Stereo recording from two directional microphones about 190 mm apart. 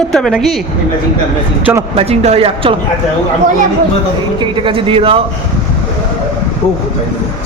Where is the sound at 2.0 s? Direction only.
30° right (ahead or behind).